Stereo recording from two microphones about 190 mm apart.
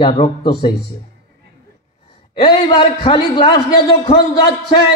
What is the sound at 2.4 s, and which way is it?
Music, 25° left (ahead or behind).